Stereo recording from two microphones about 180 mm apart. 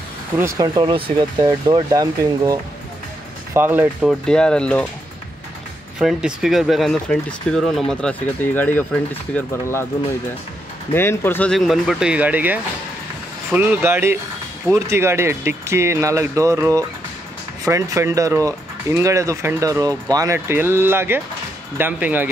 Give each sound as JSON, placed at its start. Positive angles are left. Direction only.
{"t": 0.4, "sound": "speech", "side_deg": -15}
{"t": 4.1, "sound": "speech", "side_deg": 5}
{"t": 5.9, "sound": "speech", "side_deg": -5}
{"t": 10.9, "sound": "speech", "side_deg": 10}